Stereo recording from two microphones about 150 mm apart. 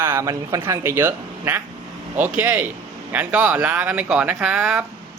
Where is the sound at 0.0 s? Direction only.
15° right (ahead or behind).